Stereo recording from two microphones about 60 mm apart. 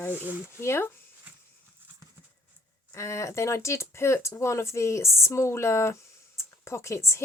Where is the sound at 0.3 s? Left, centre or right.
Right.